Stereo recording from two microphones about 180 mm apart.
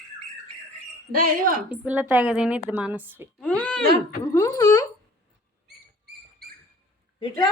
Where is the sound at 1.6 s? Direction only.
10° right (ahead or behind).